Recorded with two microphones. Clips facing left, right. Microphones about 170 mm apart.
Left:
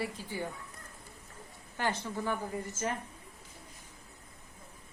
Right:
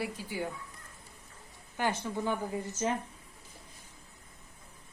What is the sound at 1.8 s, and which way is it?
Speech, 15° right (ahead or behind).